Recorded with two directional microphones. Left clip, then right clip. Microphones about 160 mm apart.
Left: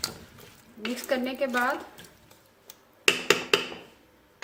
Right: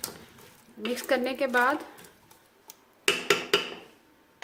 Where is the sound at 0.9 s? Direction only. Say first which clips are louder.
Right 2 dB; 65° right (ahead or behind).